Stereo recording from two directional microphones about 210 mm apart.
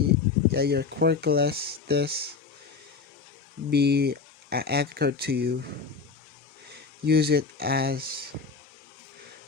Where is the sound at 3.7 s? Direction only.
50° right (ahead or behind).